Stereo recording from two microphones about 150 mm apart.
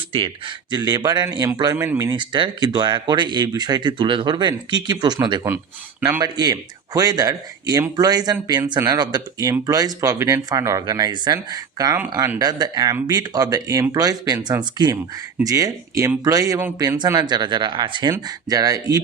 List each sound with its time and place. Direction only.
0.1 s speech: 35° right (ahead or behind)
1.7 s speech: 20° right (ahead or behind)
2.0 s speech: 30° right (ahead or behind)